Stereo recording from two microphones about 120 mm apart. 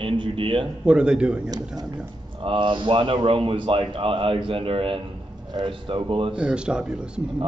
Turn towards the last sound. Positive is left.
turn(degrees=-5)  # may be behind; listen again after turning